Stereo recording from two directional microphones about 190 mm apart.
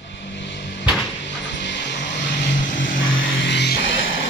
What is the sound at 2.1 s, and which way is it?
Vehicle, 60° left (ahead or behind).